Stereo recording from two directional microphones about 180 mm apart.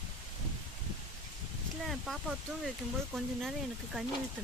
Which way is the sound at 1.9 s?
Centre (ahead or behind).